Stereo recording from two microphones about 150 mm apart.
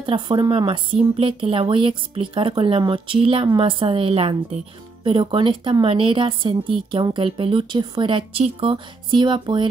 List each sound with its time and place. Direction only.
0.0 s speech: 35° right (ahead or behind)